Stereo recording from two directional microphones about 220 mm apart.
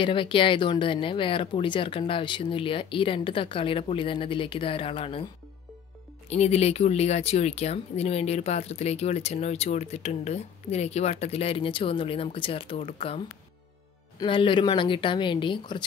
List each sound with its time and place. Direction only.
0.0 s speech: 25° left (ahead or behind)
6.2 s speech: 30° left (ahead or behind)
14.2 s speech: 20° left (ahead or behind)